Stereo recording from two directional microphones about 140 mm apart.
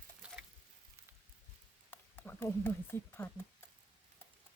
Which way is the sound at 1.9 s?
15° left (ahead or behind).